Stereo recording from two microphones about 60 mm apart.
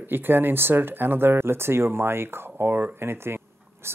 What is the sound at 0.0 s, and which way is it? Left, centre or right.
Speech, right.